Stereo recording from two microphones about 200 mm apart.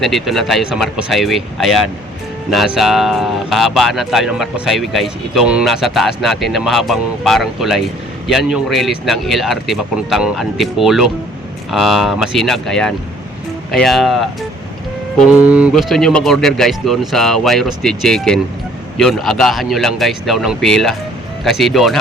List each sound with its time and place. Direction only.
0.0 s speech: centre (ahead or behind)
15.4 s speech: 5° right (ahead or behind)